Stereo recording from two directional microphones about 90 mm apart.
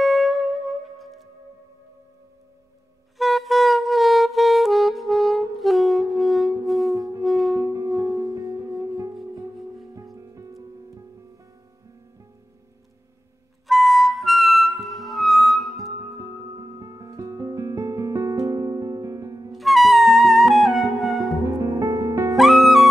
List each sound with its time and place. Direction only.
0.0 s music: centre (ahead or behind)
3.2 s music: centre (ahead or behind)
7.0 s music: 40° right (ahead or behind)
7.2 s music: centre (ahead or behind)
7.6 s music: 40° right (ahead or behind)
10.1 s music: 35° right (ahead or behind)
13.7 s music: centre (ahead or behind)
16.0 s music: 40° right (ahead or behind)
19.5 s music: centre (ahead or behind)
21.5 s music: 35° right (ahead or behind)
22.3 s music: centre (ahead or behind)